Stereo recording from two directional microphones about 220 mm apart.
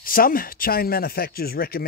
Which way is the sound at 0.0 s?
40° left (ahead or behind).